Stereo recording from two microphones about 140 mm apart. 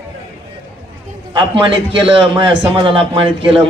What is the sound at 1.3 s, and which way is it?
A man's voice, 35° right (ahead or behind).